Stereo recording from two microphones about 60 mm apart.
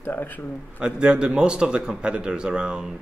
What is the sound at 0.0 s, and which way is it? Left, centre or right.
Speech, left.